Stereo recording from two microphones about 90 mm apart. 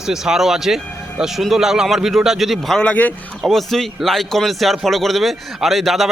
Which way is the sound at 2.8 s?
20° left (ahead or behind).